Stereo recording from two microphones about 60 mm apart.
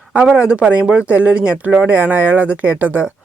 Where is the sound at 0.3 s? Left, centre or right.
Centre.